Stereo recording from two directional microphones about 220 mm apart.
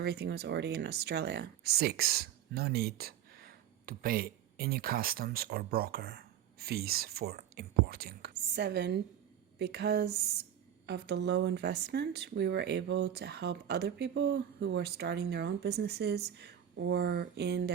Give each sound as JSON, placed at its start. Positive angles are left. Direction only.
{"t": 0.0, "sound": "speech", "side_deg": -45}